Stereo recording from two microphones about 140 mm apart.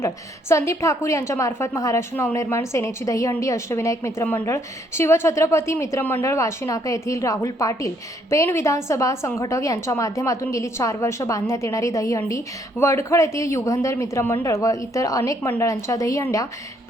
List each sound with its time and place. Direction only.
0.0 s a woman's voice: 20° left (ahead or behind)